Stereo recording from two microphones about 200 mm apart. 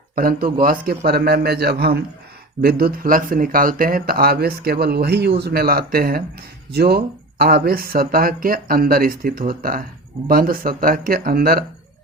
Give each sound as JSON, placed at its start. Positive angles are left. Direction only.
{"t": 0.2, "sound": "speech", "side_deg": -45}